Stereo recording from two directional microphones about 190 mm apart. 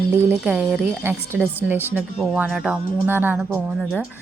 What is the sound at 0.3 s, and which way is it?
A woman's voice, 10° right (ahead or behind).